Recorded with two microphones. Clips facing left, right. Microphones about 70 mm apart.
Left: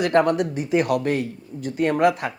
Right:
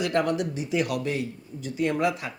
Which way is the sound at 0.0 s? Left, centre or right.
Left.